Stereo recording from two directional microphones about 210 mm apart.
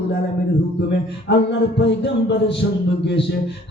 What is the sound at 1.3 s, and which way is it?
A man's voice, 55° left (ahead or behind).